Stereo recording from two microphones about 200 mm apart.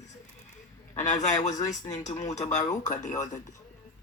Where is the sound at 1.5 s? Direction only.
15° left (ahead or behind).